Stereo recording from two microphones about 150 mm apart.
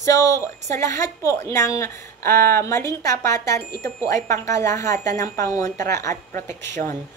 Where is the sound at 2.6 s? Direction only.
20° left (ahead or behind).